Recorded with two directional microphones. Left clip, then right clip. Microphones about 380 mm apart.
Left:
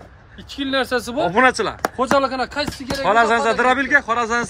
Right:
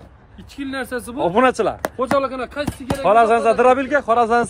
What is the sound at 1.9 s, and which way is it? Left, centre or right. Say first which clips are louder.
Speech: left 4 dB; left.